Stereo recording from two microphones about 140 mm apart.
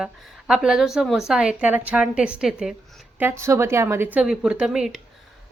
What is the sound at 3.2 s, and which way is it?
A woman's voice, 20° right (ahead or behind).